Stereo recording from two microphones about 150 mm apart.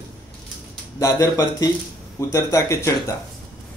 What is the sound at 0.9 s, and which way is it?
Speech, 20° left (ahead or behind).